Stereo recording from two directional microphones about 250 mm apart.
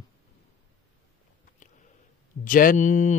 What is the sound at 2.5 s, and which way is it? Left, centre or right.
Mantra, left.